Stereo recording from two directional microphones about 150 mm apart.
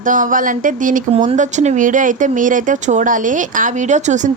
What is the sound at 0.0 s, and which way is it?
Speech, 60° right (ahead or behind).